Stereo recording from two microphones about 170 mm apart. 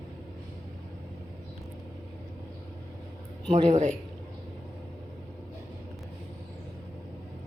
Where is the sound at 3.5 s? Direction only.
45° right (ahead or behind).